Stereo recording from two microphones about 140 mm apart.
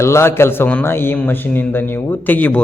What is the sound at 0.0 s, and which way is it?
A man's voice, 20° left (ahead or behind).